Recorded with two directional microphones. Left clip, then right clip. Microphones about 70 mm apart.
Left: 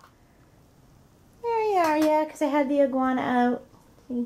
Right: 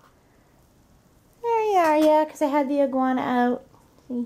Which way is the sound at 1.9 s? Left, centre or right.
Right.